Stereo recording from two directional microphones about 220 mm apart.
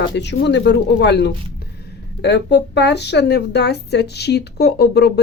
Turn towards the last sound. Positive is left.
turn(degrees=45)  # may be behind; listen again after turning